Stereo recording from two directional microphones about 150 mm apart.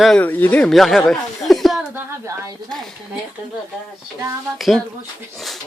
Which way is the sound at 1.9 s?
20° right (ahead or behind).